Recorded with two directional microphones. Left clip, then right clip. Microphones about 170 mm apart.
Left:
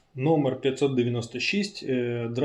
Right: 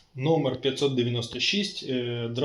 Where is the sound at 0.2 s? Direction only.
20° left (ahead or behind).